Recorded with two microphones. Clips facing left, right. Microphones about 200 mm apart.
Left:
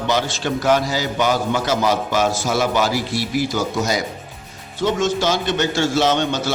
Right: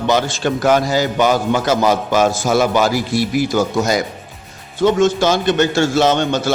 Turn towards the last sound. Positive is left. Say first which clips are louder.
# right 3 dB
turn(degrees=-50)  # may be behind; listen again after turning